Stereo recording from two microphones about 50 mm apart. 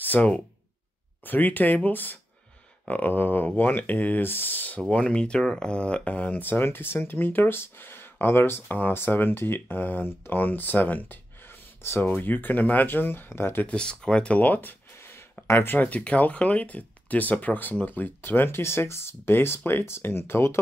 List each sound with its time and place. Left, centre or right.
0.0 s a sound: left
1.2 s speech: left
4.7 s speech: left
6.6 s speech: left
8.6 s speech: left
8.9 s speech: left
13.7 s speech: centre; by 14.8 s left
15.0 s a sound: left
15.5 s speech: left
15.9 s speech: left